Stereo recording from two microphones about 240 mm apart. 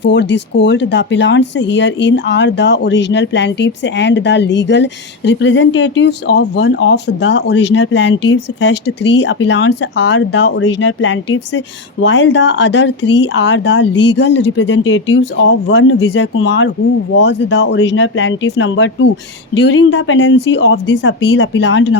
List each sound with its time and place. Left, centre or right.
0.0 s speech: left